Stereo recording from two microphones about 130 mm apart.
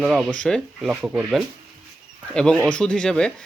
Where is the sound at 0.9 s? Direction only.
10° right (ahead or behind).